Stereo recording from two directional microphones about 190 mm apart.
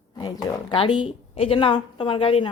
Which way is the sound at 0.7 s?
25° left (ahead or behind).